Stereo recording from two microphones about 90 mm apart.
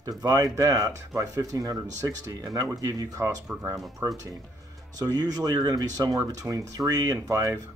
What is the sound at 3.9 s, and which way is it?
Speech, 40° right (ahead or behind).